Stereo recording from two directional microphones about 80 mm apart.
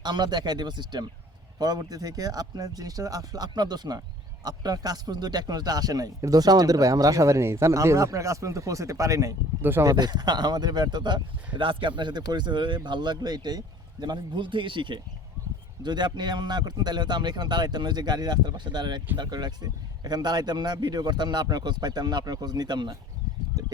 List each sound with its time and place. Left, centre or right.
0.0 s a man's voice: right
1.5 s speech: right
9.6 s speech: right
9.9 s speech: right
15.8 s a man's voice: right
23.6 s a sound: right